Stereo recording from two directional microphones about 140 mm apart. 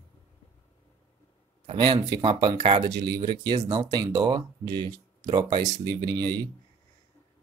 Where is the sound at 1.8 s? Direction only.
30° right (ahead or behind).